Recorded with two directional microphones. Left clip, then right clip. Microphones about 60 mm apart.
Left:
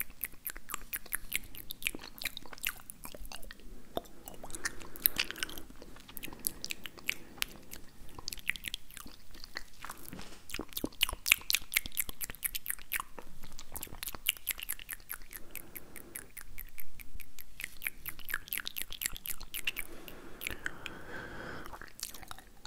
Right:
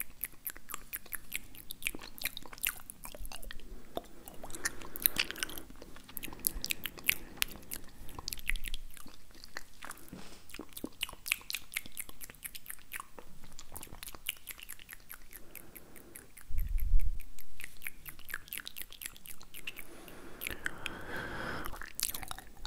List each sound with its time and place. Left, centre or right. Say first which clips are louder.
0.0 s chewing: left 3 dB; centre
8.5 s chewing: left 4 dB; centre
10.1 s biting: left 5 dB; left
13.6 s a sound: left 4 dB; centre
17.6 s chewing: left 5 dB; centre
19.0 s chewing: left 8 dB; left
19.9 s chewing: left 2 dB; centre
20.2 s chewing: even; centre
20.7 s chewing: right 3 dB; centre